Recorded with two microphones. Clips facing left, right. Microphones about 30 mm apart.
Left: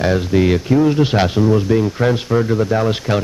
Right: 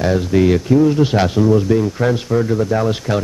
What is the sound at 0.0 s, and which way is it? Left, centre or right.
Speech, centre.